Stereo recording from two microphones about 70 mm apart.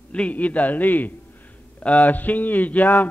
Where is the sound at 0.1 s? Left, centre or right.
Centre.